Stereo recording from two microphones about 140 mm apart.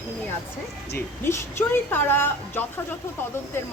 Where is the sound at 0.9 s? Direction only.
15° left (ahead or behind).